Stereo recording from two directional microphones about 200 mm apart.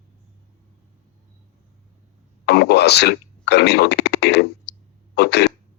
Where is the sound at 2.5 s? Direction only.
55° left (ahead or behind).